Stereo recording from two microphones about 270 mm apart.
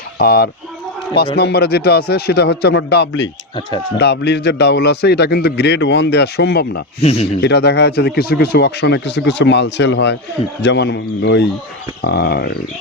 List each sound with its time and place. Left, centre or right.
0.2 s speech: left
7.0 s speech: left
7.4 s speech: left